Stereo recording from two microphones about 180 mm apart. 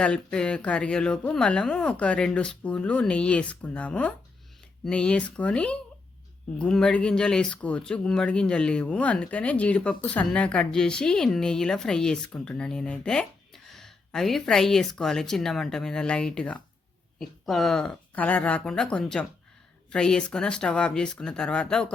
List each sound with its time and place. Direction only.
0.0 s speech: 5° left (ahead or behind)